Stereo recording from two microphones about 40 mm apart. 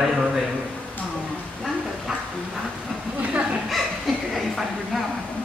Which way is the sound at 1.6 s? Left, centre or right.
Centre.